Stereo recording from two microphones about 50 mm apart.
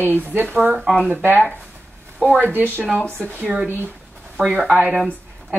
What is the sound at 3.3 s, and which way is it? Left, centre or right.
Speech, right.